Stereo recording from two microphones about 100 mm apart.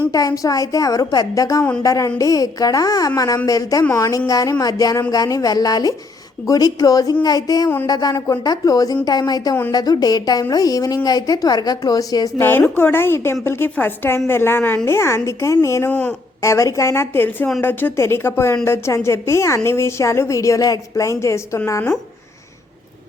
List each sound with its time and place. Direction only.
0.1 s a woman's voice: 35° left (ahead or behind)
12.4 s a woman's voice: 20° left (ahead or behind)
15.9 s speech: 10° left (ahead or behind)
16.4 s a woman's voice: 30° left (ahead or behind)